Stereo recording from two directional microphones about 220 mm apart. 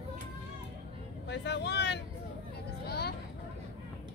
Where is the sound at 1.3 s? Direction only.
50° left (ahead or behind).